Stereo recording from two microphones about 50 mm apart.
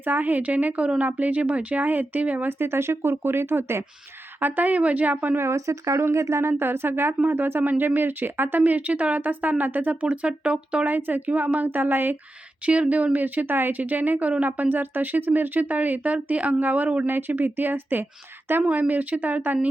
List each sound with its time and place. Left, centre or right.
0.0 s speech: right
2.5 s speech: right
4.4 s speech: right
5.4 s a woman's voice: right
10.8 s speech: right
12.6 s speech: right
17.1 s speech: right